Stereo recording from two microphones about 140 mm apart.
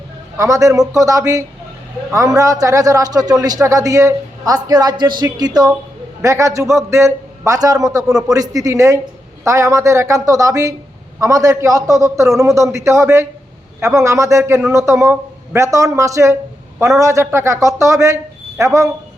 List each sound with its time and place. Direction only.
0.3 s a man's voice: 25° right (ahead or behind)